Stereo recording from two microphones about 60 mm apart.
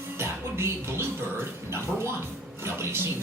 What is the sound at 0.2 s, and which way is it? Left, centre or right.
Music, right.